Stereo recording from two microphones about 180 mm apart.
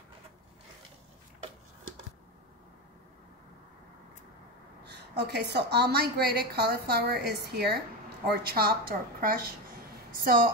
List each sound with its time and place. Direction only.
4.8 s a woman's voice: 70° right (ahead or behind); by 10.5 s 55° right (ahead or behind)